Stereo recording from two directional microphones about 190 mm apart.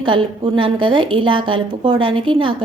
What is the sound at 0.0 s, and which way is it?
Speech, 25° right (ahead or behind).